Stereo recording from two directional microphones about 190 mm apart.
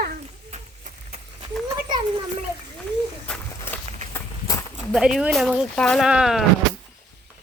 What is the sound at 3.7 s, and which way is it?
Walk, 10° left (ahead or behind).